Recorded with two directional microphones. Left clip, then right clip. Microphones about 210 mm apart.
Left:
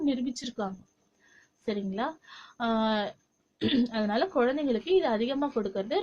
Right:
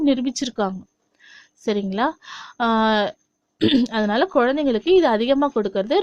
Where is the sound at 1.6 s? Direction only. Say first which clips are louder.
Right 10 dB; 50° right (ahead or behind).